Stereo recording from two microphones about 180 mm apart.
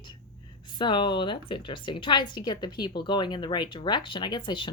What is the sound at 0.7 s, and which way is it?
Speech, 25° left (ahead or behind).